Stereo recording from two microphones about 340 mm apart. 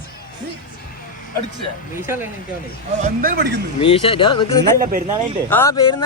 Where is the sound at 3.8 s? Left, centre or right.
Centre.